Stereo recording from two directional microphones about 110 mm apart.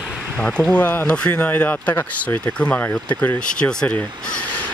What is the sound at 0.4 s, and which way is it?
Speech, 10° left (ahead or behind).